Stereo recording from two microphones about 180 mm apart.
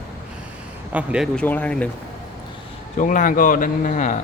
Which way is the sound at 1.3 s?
10° left (ahead or behind).